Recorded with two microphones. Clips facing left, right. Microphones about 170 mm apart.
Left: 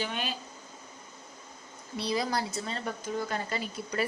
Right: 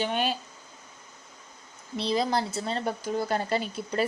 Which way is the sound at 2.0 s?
25° right (ahead or behind).